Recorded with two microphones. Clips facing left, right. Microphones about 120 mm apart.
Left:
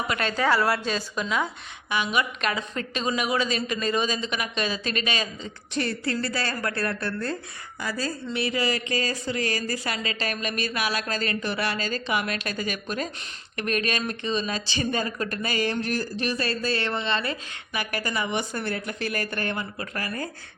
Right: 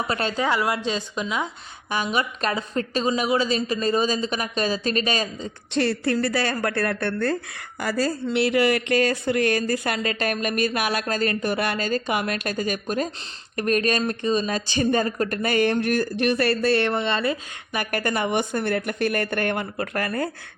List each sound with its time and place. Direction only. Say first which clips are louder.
0.1 s a woman's voice: right 2 dB; 30° right (ahead or behind)
0.3 s a woman's voice: left 2 dB; 15° right (ahead or behind)
1.9 s a woman's voice: right 1 dB; 40° right (ahead or behind)
5.7 s speech: right 5 dB; 65° right (ahead or behind)
7.8 s speech: right 6 dB; 75° right (ahead or behind)
17.7 s speech: right 4 dB; 50° right (ahead or behind)